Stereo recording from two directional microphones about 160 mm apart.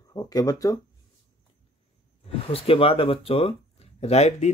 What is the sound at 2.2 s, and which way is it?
Speech, 35° left (ahead or behind).